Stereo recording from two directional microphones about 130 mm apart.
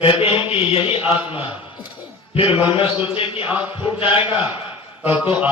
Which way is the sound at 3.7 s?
45° left (ahead or behind).